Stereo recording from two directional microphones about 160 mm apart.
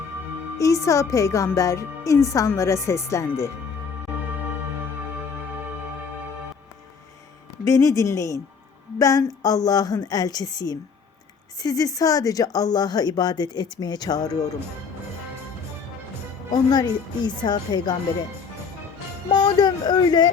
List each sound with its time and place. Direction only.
0.6 s speech: 20° left (ahead or behind)
7.6 s speech: 20° left (ahead or behind)
16.6 s speech: 25° left (ahead or behind)
19.3 s speech: 25° left (ahead or behind)